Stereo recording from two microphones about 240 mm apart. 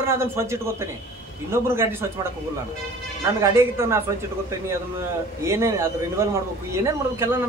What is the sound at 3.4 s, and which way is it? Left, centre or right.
Speech, centre.